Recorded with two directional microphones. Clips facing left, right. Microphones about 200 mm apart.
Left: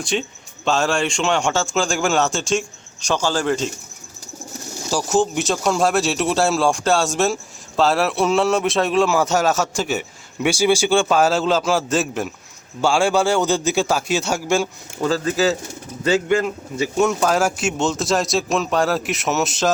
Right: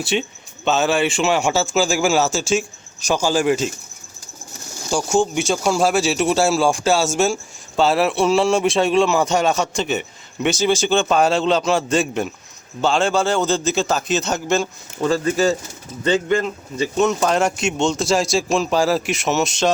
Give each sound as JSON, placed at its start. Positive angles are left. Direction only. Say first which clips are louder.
{"t": 0.0, "sound": "speech", "louder": "right 2 dB", "side_deg": -5}
{"t": 4.9, "sound": "a man's voice", "louder": "even", "side_deg": 5}
{"t": 15.0, "sound": "a man's voice", "louder": "right 1 dB", "side_deg": 0}